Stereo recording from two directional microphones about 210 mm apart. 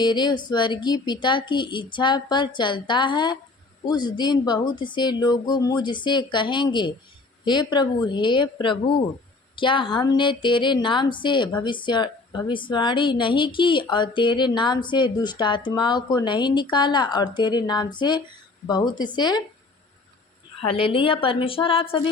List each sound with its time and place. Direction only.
0.0 s a woman's voice: 20° left (ahead or behind)
20.6 s a woman's voice: 25° left (ahead or behind)